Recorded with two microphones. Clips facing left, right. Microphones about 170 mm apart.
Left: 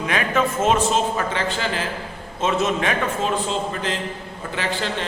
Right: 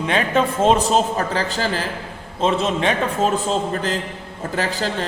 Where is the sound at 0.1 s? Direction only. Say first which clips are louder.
Right 3 dB; 30° right (ahead or behind).